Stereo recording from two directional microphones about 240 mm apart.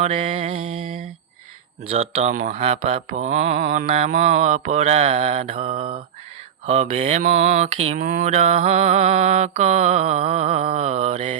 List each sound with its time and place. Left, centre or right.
0.0 s mantra: right
0.7 s a sound: right
1.9 s mantra: right